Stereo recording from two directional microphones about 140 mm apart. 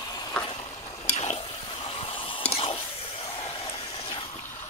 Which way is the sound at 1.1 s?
45° left (ahead or behind).